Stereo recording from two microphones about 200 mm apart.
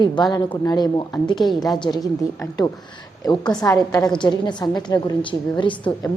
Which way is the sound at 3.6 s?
20° left (ahead or behind).